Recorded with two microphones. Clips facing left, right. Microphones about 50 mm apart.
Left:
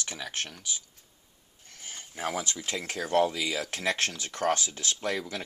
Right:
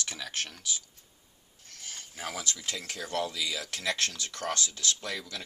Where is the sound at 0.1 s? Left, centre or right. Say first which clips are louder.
Left 1 dB; centre.